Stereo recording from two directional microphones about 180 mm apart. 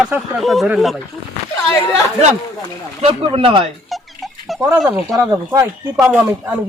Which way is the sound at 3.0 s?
30° right (ahead or behind).